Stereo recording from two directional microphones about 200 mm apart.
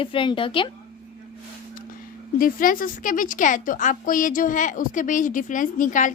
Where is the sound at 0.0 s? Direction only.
25° left (ahead or behind).